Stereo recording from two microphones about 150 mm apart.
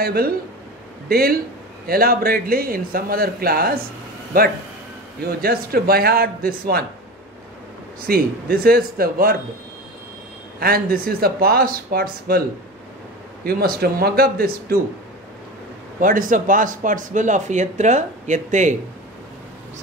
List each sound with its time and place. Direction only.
0.0 s speech: 90° right
4.3 s speech: 75° right (ahead or behind)
5.4 s speech: 90° right
8.1 s speech: 85° right
10.6 s speech: 80° right
16.0 s speech: 65° right (ahead or behind)